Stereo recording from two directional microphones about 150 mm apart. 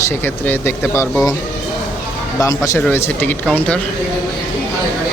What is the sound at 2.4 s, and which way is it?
Speech, 20° left (ahead or behind).